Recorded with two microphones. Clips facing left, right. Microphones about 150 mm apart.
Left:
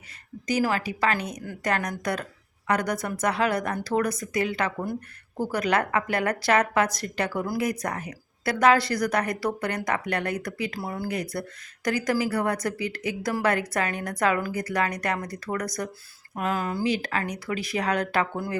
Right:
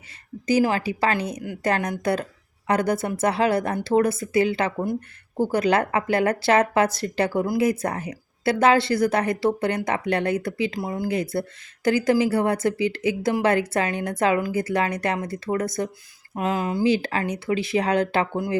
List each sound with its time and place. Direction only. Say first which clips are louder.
0.4 s speech: right 5 dB; 30° right (ahead or behind)